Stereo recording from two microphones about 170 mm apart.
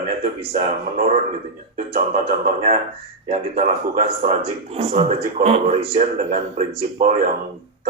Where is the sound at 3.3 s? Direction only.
40° right (ahead or behind).